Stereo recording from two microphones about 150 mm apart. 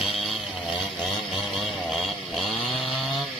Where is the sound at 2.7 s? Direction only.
40° left (ahead or behind).